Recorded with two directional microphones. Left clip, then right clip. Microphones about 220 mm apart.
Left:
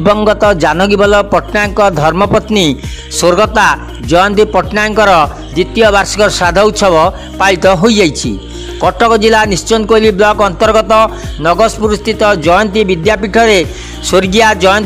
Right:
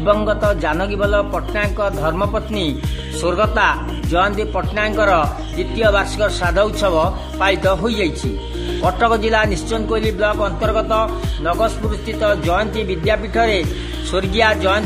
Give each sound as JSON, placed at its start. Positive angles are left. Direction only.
{"t": 0.0, "sound": "speech", "side_deg": 50}